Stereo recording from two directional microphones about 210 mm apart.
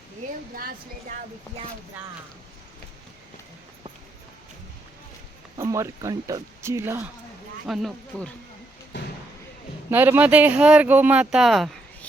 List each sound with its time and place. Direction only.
0.5 s speech: 45° right (ahead or behind)
5.5 s speech: 15° right (ahead or behind)
7.7 s speech: centre (ahead or behind)
9.9 s speech: 10° right (ahead or behind)